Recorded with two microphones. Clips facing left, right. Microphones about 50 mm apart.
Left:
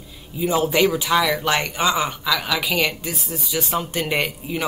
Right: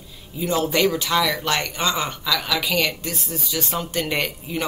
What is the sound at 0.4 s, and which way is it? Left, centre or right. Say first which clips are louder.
Speech: left 2 dB; centre.